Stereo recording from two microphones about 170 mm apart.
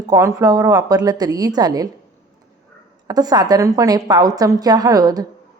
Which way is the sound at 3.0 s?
20° right (ahead or behind).